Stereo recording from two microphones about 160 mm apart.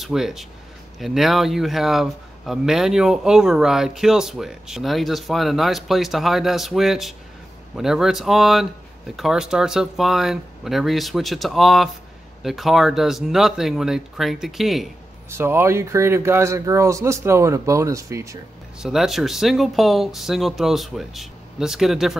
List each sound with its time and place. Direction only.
0.0 s speech: centre (ahead or behind)
15.2 s speech: 15° right (ahead or behind)
18.8 s speech: 5° right (ahead or behind)